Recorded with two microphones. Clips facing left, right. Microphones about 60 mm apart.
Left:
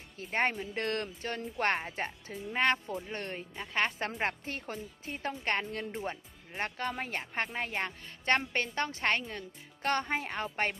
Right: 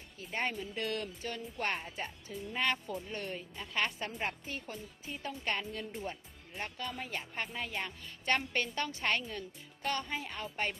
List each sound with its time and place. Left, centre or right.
0.2 s speech: left
0.6 s speech: left
2.5 s a woman's voice: left
3.9 s a woman's voice: left
9.8 s speech: left